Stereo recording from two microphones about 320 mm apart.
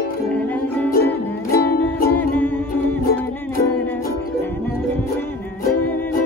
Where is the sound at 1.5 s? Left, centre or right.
Left.